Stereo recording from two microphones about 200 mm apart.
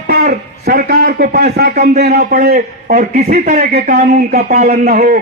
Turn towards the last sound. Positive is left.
turn(degrees=-45)  # may be behind; listen again after turning